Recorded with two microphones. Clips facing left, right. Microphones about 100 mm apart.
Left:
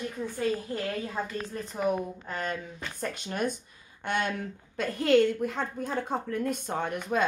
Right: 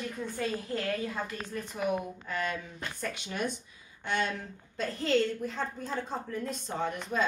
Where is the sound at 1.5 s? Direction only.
35° left (ahead or behind).